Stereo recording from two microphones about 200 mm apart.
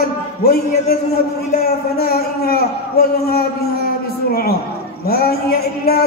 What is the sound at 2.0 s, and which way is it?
A man's voice, 50° left (ahead or behind).